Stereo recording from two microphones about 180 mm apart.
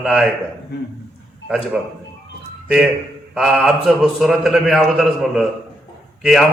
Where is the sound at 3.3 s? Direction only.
5° right (ahead or behind).